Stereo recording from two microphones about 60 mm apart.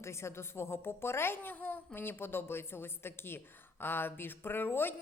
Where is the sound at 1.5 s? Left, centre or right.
Left.